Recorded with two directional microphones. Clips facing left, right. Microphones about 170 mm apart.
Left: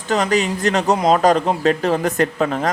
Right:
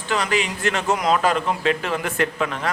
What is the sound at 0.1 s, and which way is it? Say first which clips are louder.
A man's voice: left 5 dB; 40° left (ahead or behind).